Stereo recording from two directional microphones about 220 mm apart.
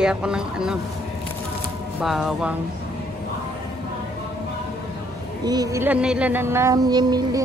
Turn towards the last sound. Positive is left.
turn(degrees=-20)  # may be behind; listen again after turning